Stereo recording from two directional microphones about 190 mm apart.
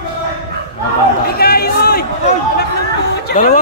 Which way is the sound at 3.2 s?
45° left (ahead or behind).